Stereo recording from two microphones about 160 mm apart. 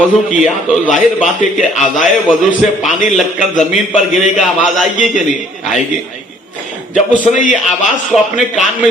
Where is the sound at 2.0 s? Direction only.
50° left (ahead or behind).